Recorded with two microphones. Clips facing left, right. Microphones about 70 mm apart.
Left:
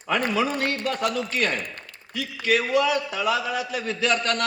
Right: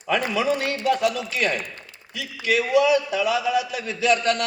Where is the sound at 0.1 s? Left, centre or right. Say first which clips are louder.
Right 1 dB; left.